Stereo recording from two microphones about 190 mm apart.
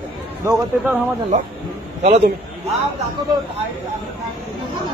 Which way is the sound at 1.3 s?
40° right (ahead or behind).